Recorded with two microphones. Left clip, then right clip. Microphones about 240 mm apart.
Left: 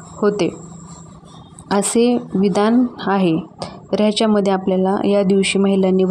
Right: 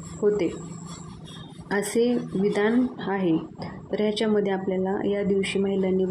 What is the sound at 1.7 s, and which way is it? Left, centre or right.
Speech, left.